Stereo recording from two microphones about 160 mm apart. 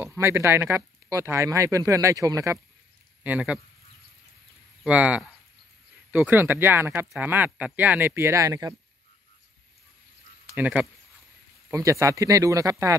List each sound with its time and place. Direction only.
0.0 s speech: 15° right (ahead or behind)
3.3 s speech: 10° right (ahead or behind)
4.8 s speech: 10° right (ahead or behind)
10.5 s speech: 10° right (ahead or behind)
11.7 s speech: 20° right (ahead or behind)